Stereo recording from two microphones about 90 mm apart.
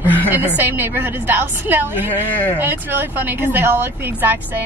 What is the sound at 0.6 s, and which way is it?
A woman's voice, 20° right (ahead or behind).